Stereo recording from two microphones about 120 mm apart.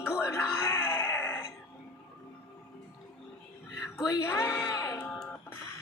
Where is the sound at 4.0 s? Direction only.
30° left (ahead or behind).